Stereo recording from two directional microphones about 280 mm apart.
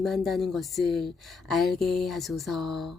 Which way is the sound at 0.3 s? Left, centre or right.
Centre.